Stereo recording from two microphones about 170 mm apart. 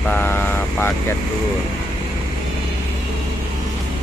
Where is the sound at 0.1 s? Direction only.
10° left (ahead or behind).